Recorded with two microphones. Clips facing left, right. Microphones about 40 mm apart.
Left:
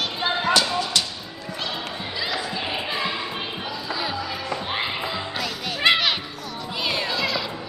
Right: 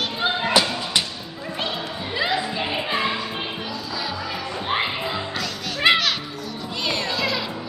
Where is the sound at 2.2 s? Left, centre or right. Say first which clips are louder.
Right 5 dB; right.